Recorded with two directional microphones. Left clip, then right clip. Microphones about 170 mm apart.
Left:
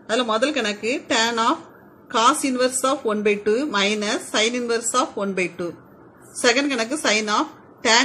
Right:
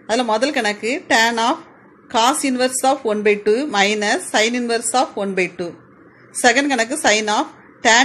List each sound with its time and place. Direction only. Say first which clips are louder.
0.6 s speech: right 4 dB; 25° right (ahead or behind)